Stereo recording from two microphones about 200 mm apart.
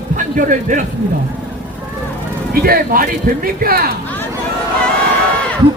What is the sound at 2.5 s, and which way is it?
A man's voice, 45° right (ahead or behind).